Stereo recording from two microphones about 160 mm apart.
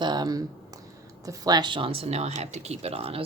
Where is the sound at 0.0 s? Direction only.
25° right (ahead or behind).